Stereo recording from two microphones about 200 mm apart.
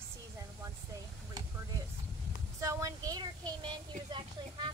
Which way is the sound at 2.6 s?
15° right (ahead or behind).